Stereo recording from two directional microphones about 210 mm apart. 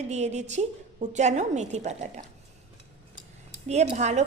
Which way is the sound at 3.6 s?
30° right (ahead or behind).